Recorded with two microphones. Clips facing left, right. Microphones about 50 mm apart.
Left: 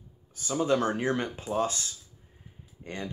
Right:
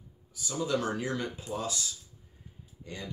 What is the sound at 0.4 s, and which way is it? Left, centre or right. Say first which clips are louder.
Speech: left 5 dB; left.